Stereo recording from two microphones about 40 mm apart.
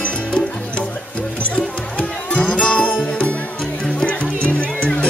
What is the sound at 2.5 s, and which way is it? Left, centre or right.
Music, left.